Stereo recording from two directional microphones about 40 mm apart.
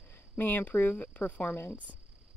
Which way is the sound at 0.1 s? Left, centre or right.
Left.